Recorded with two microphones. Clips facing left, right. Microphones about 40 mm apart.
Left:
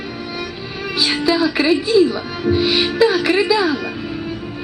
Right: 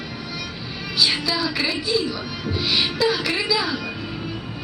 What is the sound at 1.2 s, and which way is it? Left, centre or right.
A woman's voice, left.